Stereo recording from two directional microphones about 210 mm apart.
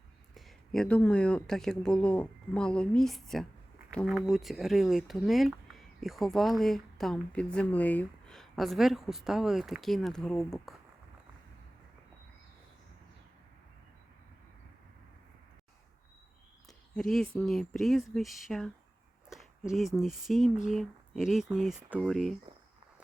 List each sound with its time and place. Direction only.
0.3 s speech: centre (ahead or behind)
16.6 s speech: centre (ahead or behind)
19.7 s speech: centre (ahead or behind)